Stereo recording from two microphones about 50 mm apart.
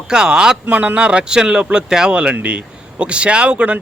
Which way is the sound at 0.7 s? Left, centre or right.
Right.